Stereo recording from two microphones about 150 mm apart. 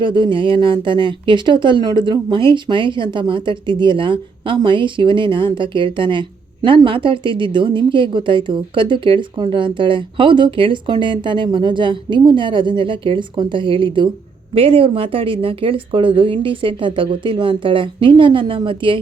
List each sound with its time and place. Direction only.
0.0 s speech: 35° right (ahead or behind)